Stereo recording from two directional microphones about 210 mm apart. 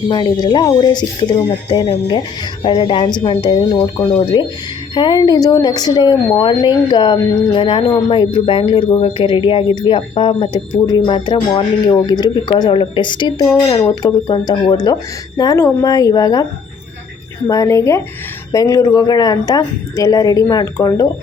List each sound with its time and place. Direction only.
0.1 s speech: 20° left (ahead or behind)
17.5 s speech: 15° left (ahead or behind)